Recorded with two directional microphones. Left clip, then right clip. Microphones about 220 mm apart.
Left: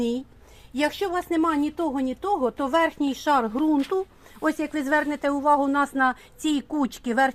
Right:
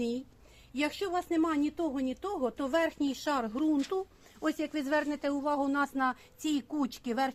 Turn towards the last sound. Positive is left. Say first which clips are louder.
# left 9 dB
turn(degrees=40)  # may be behind; listen again after turning